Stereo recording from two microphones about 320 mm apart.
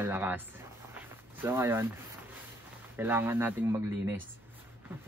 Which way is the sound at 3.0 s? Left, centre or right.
Centre.